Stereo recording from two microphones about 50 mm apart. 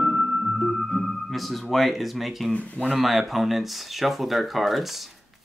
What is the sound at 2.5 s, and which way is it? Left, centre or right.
Speech, left.